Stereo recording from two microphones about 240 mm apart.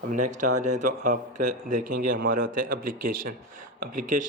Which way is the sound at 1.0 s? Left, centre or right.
Right.